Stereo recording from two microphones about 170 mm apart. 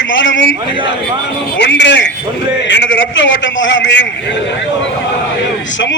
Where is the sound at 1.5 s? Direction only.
90° left.